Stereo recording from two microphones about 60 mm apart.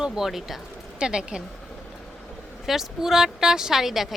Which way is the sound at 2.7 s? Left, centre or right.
Centre.